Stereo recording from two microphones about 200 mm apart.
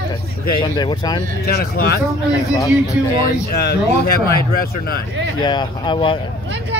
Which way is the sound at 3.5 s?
50° left (ahead or behind).